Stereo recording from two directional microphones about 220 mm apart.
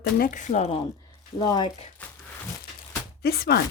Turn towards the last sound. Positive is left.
turn(degrees=45)  # may be behind; listen again after turning